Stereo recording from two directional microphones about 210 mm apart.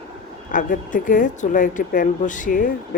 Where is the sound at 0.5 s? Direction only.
40° left (ahead or behind).